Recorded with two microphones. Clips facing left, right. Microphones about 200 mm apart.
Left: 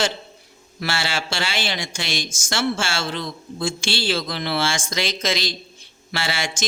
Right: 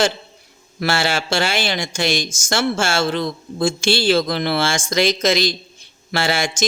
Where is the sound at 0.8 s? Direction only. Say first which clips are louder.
Right 6 dB; 45° right (ahead or behind).